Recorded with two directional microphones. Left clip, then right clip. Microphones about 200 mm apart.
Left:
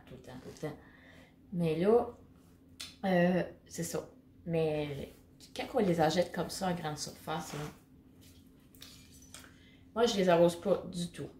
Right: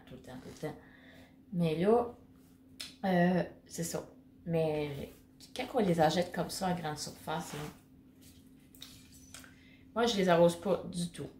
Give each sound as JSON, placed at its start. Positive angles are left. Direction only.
{"t": 0.2, "sound": "speech", "side_deg": 0}
{"t": 3.0, "sound": "a woman's voice", "side_deg": -10}
{"t": 9.9, "sound": "speech", "side_deg": -5}